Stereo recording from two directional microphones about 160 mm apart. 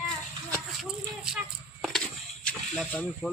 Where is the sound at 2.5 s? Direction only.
5° left (ahead or behind).